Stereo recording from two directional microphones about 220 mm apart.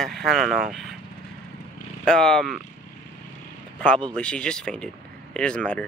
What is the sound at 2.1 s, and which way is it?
Speech, centre (ahead or behind).